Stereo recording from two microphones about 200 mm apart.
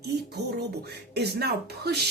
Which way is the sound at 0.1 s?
55° right (ahead or behind).